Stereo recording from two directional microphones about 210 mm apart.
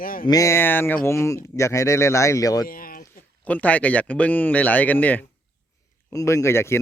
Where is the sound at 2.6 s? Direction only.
45° left (ahead or behind).